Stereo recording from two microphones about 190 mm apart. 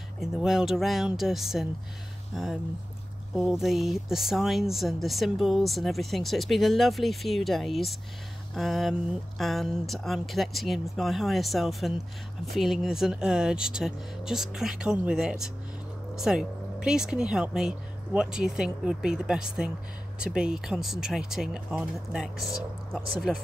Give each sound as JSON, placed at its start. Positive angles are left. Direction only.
{"t": 0.2, "sound": "speech", "side_deg": 0}